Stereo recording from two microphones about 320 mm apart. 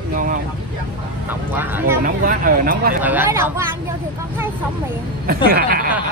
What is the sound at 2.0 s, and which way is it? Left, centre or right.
Speech, right.